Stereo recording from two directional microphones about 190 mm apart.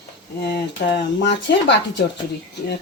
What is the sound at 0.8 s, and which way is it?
Speech, 60° left (ahead or behind).